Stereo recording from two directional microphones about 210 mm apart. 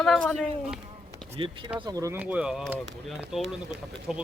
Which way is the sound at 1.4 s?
25° right (ahead or behind).